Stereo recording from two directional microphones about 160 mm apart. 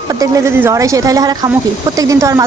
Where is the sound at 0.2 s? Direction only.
20° right (ahead or behind).